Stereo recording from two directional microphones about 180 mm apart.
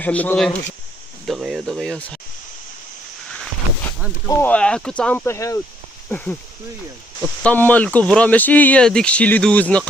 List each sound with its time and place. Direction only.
0.0 s speech: 10° left (ahead or behind)
4.3 s speech: 10° left (ahead or behind)
7.4 s speech: 10° left (ahead or behind)